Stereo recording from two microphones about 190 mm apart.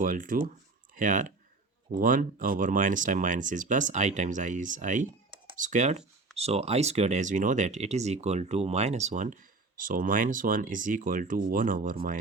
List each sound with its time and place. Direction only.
0.0 s speech: 45° right (ahead or behind)